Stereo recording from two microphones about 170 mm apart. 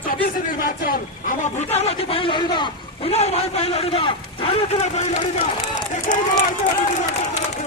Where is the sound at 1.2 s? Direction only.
45° left (ahead or behind).